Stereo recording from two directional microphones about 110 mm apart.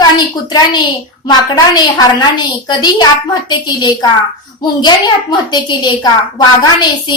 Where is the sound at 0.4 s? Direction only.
40° left (ahead or behind).